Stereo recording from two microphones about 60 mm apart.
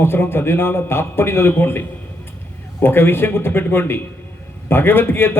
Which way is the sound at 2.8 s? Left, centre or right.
Left.